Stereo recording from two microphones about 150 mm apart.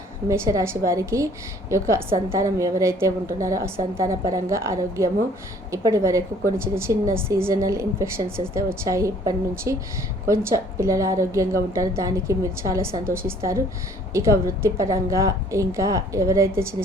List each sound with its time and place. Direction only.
0.3 s a woman's voice: 20° right (ahead or behind)